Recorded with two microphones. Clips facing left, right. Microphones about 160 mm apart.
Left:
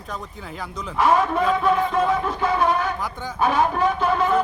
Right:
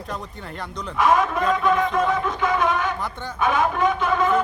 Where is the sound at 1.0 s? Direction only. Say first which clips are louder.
Left 1 dB; 30° left (ahead or behind).